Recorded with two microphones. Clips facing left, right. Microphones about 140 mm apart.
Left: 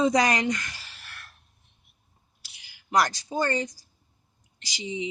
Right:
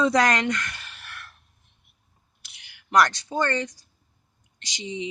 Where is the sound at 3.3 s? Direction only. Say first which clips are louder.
Even; 70° right (ahead or behind).